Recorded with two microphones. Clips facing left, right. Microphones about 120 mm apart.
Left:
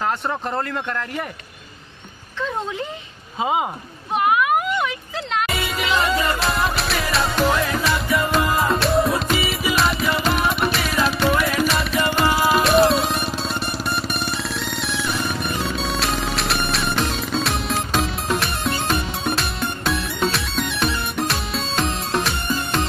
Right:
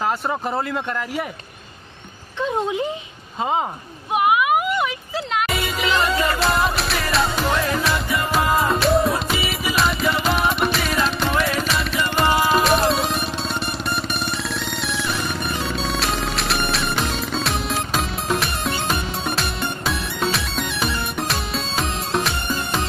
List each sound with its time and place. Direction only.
0.3 s speech: 5° right (ahead or behind)
2.4 s speech: 15° right (ahead or behind)
4.1 s music: 5° right (ahead or behind)